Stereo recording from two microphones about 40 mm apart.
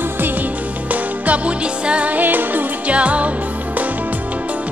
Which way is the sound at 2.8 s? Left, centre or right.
Right.